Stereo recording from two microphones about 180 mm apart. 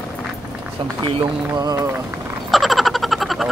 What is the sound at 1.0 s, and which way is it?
Speech, 30° right (ahead or behind).